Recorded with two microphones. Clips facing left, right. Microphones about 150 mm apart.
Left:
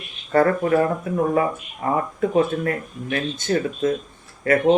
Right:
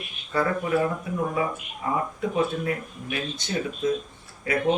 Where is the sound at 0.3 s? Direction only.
55° left (ahead or behind).